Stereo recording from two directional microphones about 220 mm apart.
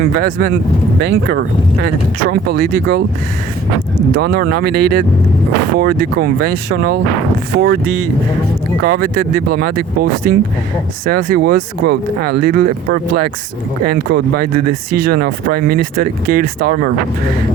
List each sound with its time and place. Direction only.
0.0 s speech: 45° right (ahead or behind)
4.1 s speech: 45° right (ahead or behind)
8.8 s speech: 40° right (ahead or behind)